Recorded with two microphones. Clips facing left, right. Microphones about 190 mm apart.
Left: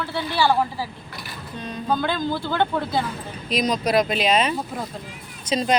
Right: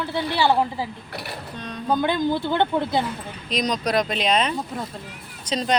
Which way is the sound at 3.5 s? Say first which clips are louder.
Left 2 dB; 5° left (ahead or behind).